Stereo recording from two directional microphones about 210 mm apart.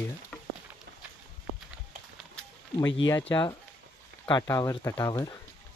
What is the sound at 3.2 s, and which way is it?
Speech, 20° left (ahead or behind).